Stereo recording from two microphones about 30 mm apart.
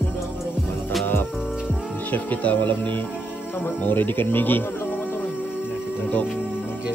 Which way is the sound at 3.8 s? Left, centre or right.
Left.